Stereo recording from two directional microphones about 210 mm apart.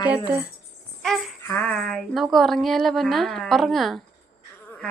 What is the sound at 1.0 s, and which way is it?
Jingle bell, centre (ahead or behind).